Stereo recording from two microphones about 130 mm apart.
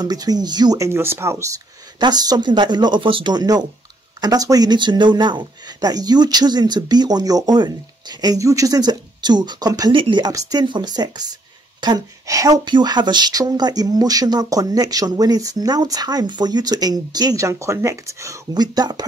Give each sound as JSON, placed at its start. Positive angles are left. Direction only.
{"t": 0.0, "sound": "speech", "side_deg": -30}
{"t": 2.0, "sound": "speech", "side_deg": -30}